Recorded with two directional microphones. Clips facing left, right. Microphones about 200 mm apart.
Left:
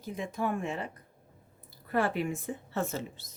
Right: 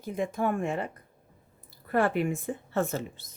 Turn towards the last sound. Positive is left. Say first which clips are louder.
# right 4 dB
turn(degrees=-50)  # may be behind; listen again after turning